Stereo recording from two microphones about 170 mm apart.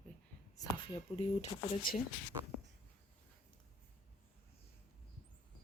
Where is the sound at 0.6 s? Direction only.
30° left (ahead or behind).